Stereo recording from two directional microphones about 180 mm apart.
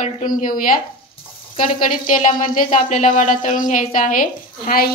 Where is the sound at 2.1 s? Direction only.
45° left (ahead or behind).